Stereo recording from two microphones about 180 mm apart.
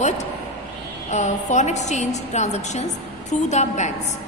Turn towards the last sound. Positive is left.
turn(degrees=40)  # may be behind; listen again after turning